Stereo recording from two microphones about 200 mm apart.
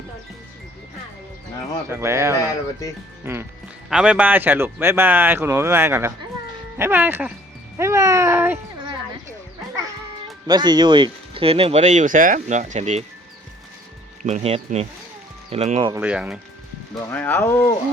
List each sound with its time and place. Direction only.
1.9 s speech: 15° right (ahead or behind)
2.4 s speech: 15° left (ahead or behind)
3.8 s speech: 5° right (ahead or behind)
7.8 s cat: 15° right (ahead or behind)
10.4 s speech: 20° right (ahead or behind)
14.2 s speech: 35° right (ahead or behind)
15.9 s speech: 10° right (ahead or behind)
17.1 s speech: 10° left (ahead or behind)